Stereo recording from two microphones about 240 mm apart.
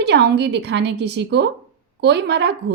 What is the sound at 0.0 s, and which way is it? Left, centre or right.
Speech, right.